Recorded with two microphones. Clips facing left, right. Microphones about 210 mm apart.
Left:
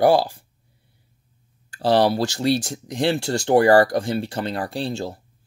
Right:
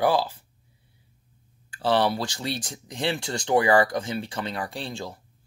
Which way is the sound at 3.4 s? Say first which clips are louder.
Left 5 dB; 40° left (ahead or behind).